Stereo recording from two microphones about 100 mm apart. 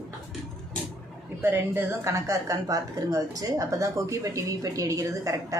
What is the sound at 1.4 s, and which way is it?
Speech, 20° right (ahead or behind).